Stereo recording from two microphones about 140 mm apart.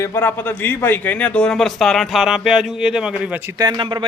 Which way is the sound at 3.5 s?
30° right (ahead or behind).